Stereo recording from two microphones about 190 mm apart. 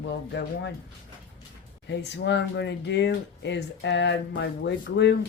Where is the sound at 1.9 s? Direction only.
65° left (ahead or behind).